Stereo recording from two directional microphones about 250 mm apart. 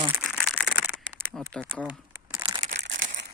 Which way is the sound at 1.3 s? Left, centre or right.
Centre.